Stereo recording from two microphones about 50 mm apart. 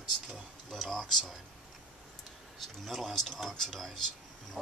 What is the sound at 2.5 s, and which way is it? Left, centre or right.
Speech, centre.